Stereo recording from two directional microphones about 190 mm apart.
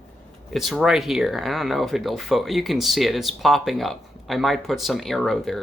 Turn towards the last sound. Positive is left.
turn(degrees=0)  # may be behind; listen again after turning